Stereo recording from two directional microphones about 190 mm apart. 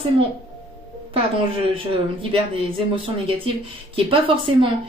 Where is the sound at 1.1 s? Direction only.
30° right (ahead or behind).